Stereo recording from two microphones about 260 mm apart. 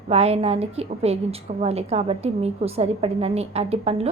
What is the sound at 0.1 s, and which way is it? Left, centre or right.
A woman's voice, right.